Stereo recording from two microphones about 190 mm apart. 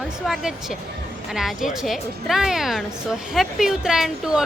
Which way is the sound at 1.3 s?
Centre (ahead or behind).